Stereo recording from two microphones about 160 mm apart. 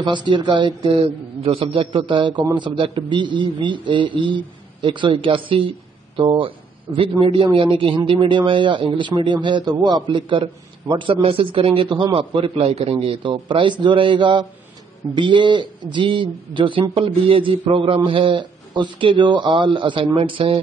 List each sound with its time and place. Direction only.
0.0 s a man's voice: 30° right (ahead or behind)